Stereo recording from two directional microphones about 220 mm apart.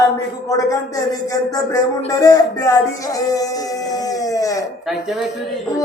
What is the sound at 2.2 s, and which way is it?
Music, 15° left (ahead or behind).